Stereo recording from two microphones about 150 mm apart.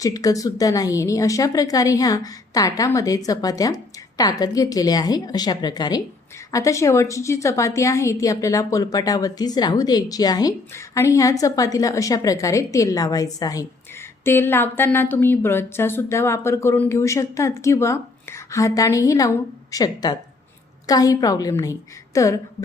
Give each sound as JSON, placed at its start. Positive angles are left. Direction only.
{"t": 0.0, "sound": "a woman's voice", "side_deg": 25}